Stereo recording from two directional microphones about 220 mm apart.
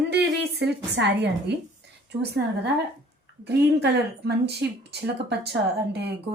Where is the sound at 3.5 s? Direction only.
50° right (ahead or behind).